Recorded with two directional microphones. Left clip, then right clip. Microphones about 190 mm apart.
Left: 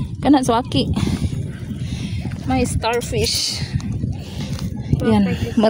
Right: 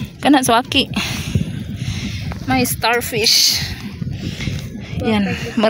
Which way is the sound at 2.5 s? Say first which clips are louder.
Right 3 dB; centre (ahead or behind).